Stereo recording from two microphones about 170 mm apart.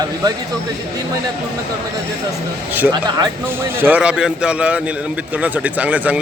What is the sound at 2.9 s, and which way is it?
Speech, 25° right (ahead or behind).